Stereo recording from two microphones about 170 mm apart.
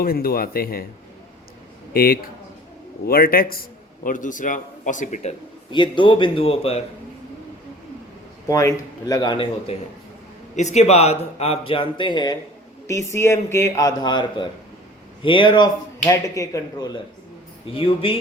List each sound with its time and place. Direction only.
0.0 s speech: 60° left (ahead or behind)
1.9 s a man's voice: 60° left (ahead or behind); by 5.4 s 45° left (ahead or behind)
5.7 s speech: 25° left (ahead or behind)
8.4 s speech: 20° left (ahead or behind)
10.5 s a man's voice: 45° left (ahead or behind); by 17.0 s 20° left (ahead or behind)
17.7 s speech: 30° left (ahead or behind)